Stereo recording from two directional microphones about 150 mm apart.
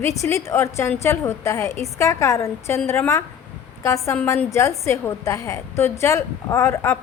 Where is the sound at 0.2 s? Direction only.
20° left (ahead or behind).